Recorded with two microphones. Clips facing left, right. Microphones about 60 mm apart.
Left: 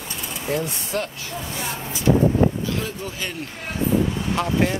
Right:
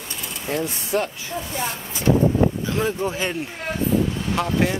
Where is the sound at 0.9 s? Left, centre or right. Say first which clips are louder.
Right 4 dB; centre.